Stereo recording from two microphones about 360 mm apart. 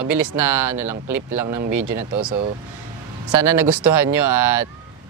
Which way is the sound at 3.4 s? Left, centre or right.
Right.